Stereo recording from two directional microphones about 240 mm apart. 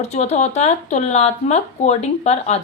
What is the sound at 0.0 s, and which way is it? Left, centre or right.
A woman's voice, left.